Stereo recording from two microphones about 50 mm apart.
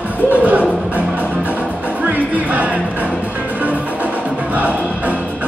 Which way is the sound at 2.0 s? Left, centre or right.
Right.